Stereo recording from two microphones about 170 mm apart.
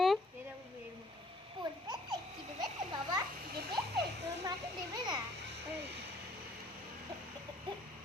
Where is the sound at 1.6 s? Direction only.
25° right (ahead or behind).